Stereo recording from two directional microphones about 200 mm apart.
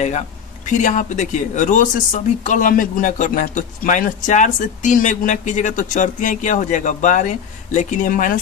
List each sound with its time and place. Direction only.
0.7 s speech: 40° left (ahead or behind)